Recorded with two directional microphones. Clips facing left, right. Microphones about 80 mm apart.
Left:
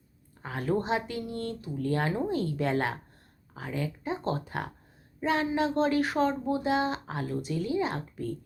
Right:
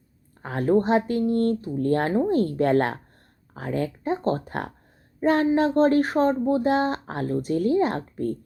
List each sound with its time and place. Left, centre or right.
0.4 s speech: right